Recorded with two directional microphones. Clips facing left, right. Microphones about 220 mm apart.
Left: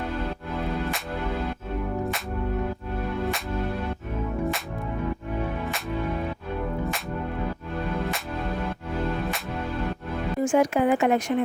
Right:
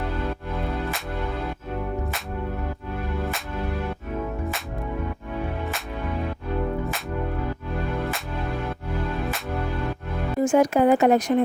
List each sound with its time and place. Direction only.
10.4 s speech: 40° right (ahead or behind)